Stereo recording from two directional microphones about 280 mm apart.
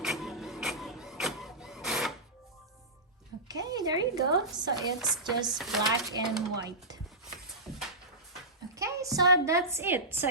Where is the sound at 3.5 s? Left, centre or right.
Centre.